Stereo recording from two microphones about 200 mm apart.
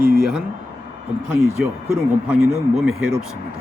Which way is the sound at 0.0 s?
45° right (ahead or behind).